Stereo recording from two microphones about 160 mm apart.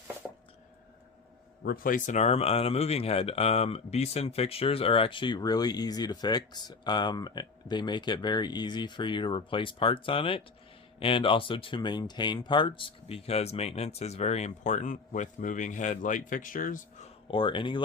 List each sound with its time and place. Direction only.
1.6 s speech: 65° left (ahead or behind)
17.3 s speech: 30° left (ahead or behind)